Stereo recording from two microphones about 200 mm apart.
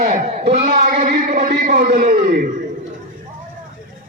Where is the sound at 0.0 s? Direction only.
50° right (ahead or behind).